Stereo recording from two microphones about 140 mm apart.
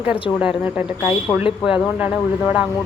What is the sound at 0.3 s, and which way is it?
Speech, 5° right (ahead or behind).